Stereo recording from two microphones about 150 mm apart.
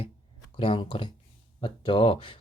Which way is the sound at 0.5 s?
35° left (ahead or behind).